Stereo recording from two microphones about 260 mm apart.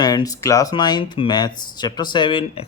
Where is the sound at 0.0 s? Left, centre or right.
Centre.